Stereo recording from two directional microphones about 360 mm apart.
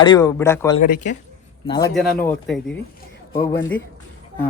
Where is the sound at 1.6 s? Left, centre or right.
Centre.